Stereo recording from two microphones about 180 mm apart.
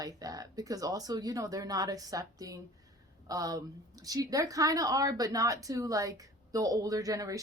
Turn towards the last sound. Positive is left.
turn(degrees=-20)  # may be behind; listen again after turning